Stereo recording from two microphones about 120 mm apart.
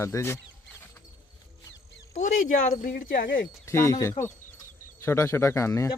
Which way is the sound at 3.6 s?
25° left (ahead or behind).